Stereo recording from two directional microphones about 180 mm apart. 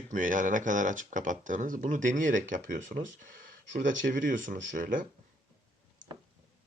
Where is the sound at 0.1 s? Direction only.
45° right (ahead or behind).